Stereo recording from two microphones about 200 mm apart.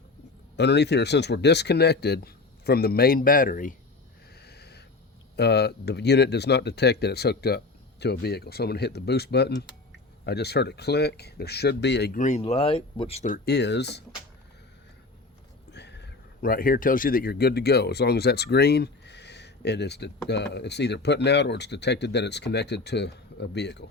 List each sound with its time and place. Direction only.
0.5 s speech: 55° left (ahead or behind)
4.4 s a sound: 55° left (ahead or behind)
5.4 s speech: 55° left (ahead or behind)
12.1 s speech: 35° left (ahead or behind)
13.3 s speech: 55° left (ahead or behind)
15.7 s speech: 60° left (ahead or behind)